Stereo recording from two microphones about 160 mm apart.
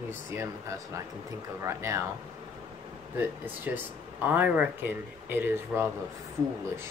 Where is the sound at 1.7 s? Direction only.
15° right (ahead or behind).